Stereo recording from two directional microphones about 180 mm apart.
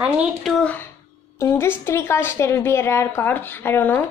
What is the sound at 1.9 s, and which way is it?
A woman's voice, 15° left (ahead or behind).